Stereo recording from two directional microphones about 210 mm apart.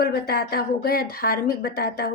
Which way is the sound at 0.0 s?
45° left (ahead or behind).